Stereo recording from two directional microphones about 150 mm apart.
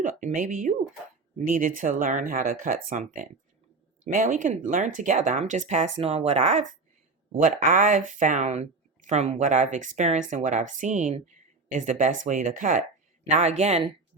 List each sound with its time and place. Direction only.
0.0 s speech: 60° right (ahead or behind)
7.4 s speech: 60° right (ahead or behind)